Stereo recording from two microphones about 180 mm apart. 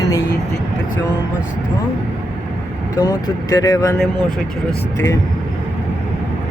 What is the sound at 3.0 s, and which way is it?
Speech, 20° left (ahead or behind).